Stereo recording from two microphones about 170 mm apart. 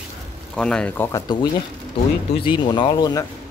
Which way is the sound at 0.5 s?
5° left (ahead or behind).